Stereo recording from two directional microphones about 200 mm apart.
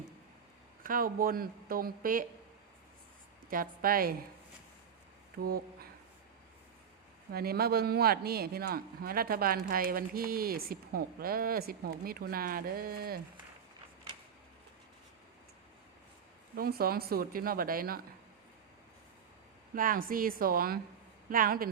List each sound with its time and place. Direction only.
0.8 s a man's voice: 45° right (ahead or behind)
3.5 s a man's voice: 45° right (ahead or behind)
5.4 s speech: 50° right (ahead or behind)
7.3 s a man's voice: 50° right (ahead or behind)
16.6 s a man's voice: 50° right (ahead or behind)
19.7 s a man's voice: 45° right (ahead or behind)